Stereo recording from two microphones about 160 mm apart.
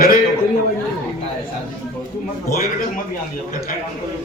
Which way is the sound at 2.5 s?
70° left (ahead or behind).